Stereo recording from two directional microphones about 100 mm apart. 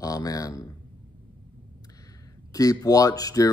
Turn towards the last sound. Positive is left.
turn(degrees=40)  # may be behind; listen again after turning